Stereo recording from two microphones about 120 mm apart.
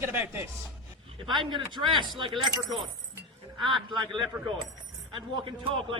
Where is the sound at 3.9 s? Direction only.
35° right (ahead or behind).